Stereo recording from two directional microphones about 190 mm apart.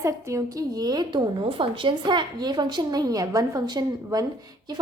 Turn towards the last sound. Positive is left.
turn(degrees=-20)  # may be behind; listen again after turning